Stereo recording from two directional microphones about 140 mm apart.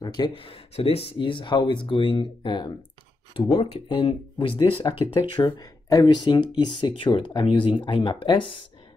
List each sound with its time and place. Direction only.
0.4 s speech: 40° left (ahead or behind)